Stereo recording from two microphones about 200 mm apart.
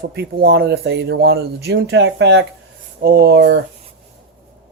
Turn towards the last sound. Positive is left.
turn(degrees=-60)  # may be behind; listen again after turning